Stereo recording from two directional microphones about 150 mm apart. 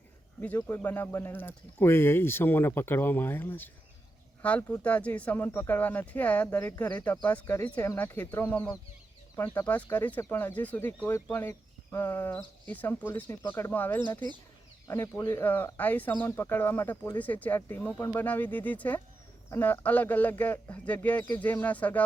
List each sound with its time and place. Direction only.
0.4 s speech: 10° left (ahead or behind)